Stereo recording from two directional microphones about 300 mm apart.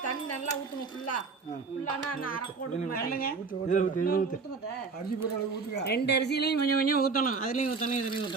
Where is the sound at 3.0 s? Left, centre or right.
Left.